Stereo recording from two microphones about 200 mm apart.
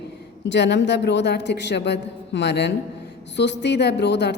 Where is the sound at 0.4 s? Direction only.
60° left (ahead or behind).